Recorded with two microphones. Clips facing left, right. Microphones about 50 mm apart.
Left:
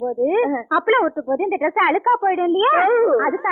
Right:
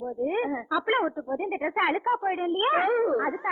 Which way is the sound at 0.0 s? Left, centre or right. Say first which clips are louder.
Left 10 dB; left.